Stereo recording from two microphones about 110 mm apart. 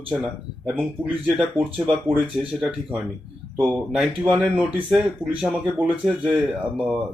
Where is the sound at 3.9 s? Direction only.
10° right (ahead or behind).